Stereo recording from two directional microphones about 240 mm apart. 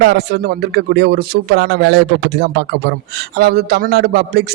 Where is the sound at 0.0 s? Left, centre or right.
Right.